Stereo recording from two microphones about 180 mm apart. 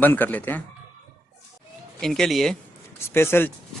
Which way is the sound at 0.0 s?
10° left (ahead or behind).